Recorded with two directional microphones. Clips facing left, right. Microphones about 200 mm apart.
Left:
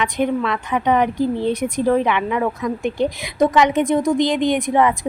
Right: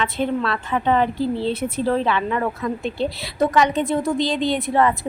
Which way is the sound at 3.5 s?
20° left (ahead or behind).